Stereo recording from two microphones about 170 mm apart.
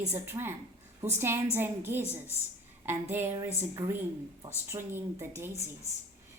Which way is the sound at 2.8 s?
15° right (ahead or behind).